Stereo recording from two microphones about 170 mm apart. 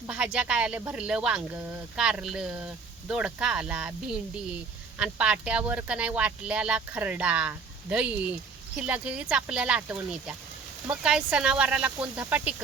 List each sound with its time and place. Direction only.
0.1 s speech: 5° right (ahead or behind)